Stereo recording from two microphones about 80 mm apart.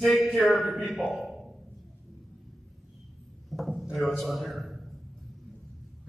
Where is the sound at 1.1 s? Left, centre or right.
Centre.